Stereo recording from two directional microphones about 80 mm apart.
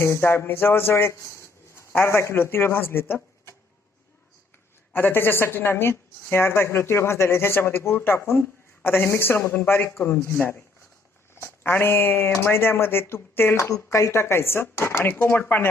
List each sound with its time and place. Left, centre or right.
0.0 s speech: left
4.9 s a woman's voice: left
13.7 s a woman's voice: left